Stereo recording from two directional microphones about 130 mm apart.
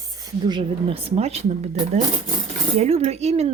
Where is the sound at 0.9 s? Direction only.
50° right (ahead or behind).